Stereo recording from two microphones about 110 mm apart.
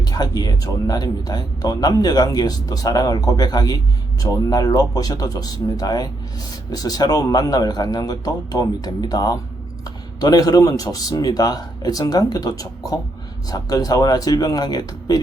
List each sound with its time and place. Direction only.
0.0 s speech: 35° left (ahead or behind)